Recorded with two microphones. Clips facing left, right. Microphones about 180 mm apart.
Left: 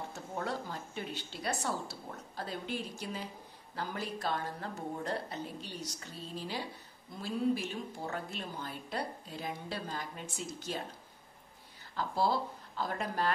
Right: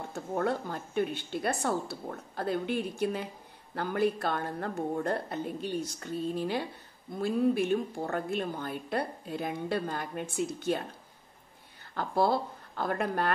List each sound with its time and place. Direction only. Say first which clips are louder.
0.1 s a woman's voice: right 10 dB; 55° right (ahead or behind)
11.9 s speech: right 4 dB; 60° right (ahead or behind)